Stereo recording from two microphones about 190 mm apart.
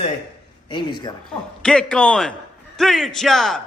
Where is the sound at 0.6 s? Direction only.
25° left (ahead or behind).